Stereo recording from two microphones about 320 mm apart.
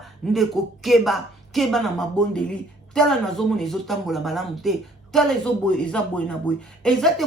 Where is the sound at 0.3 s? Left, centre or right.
Centre.